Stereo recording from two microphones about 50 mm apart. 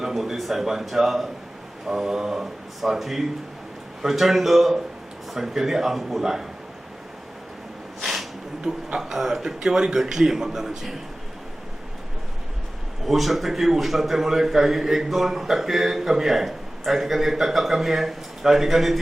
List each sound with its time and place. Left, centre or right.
0.0 s a man's voice: centre
8.0 s a sound: centre
8.6 s a man's voice: centre
13.1 s a man's voice: centre